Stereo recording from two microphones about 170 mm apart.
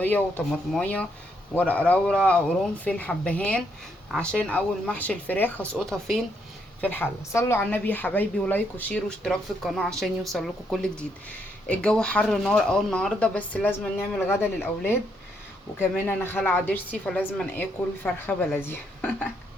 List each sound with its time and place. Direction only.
0.0 s a woman's voice: 10° left (ahead or behind)